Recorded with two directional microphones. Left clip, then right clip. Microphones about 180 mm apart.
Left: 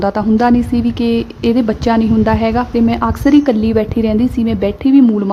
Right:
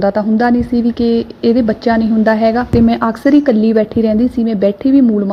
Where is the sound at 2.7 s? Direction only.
15° right (ahead or behind).